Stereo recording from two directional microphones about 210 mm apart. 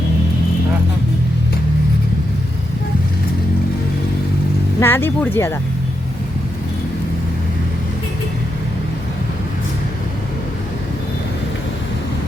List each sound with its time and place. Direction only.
4.8 s speech: 10° left (ahead or behind)